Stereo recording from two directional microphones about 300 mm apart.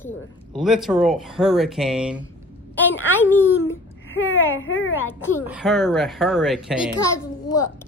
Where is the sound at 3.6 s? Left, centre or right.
Left.